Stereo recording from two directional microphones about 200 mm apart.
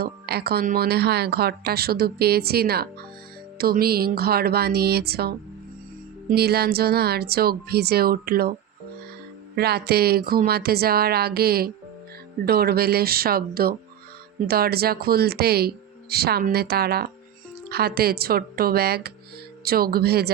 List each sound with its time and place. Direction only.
0.0 s speech: 50° right (ahead or behind)
9.6 s speech: 50° right (ahead or behind)